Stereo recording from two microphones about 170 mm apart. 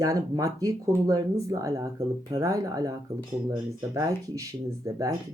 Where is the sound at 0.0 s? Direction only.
20° right (ahead or behind).